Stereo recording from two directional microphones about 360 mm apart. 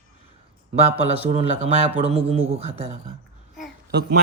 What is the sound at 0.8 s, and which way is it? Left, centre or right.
Speech, centre.